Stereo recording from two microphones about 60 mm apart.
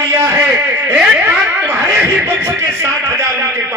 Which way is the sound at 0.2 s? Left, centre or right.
Right.